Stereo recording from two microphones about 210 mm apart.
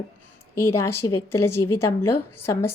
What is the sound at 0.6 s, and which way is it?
Speech, 90° left.